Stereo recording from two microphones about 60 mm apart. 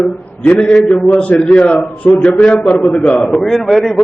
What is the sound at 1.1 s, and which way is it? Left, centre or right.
A man's voice, left.